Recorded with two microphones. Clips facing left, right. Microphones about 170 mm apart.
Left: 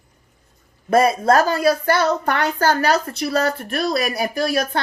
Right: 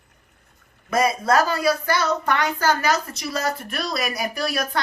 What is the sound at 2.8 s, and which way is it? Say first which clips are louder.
Speech: left 4 dB; 60° left (ahead or behind).